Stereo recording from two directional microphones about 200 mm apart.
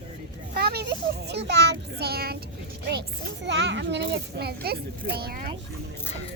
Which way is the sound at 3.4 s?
65° right (ahead or behind).